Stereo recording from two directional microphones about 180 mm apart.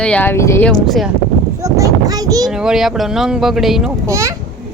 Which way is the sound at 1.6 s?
20° right (ahead or behind).